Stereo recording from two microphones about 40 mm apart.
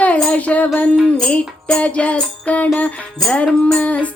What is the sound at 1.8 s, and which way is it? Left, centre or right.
Speech, left.